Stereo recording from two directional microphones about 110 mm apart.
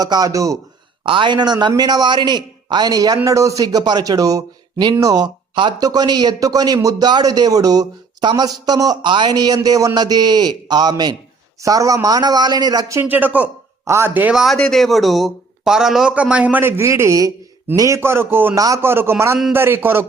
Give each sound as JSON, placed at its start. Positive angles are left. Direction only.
{"t": 0.0, "sound": "speech", "side_deg": -35}
{"t": 1.0, "sound": "speech", "side_deg": -50}
{"t": 13.0, "sound": "a man's voice", "side_deg": -15}
{"t": 14.3, "sound": "a man's voice", "side_deg": 0}
{"t": 18.5, "sound": "a man's voice", "side_deg": -30}